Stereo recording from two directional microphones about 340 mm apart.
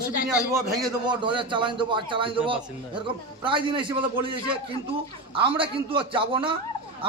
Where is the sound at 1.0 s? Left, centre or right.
Centre.